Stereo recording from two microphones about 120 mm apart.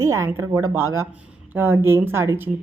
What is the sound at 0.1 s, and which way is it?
A woman's voice, 25° right (ahead or behind).